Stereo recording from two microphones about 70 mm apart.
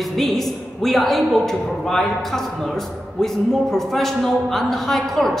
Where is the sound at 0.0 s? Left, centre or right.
Centre.